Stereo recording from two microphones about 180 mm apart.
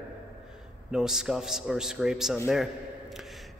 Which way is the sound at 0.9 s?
5° right (ahead or behind).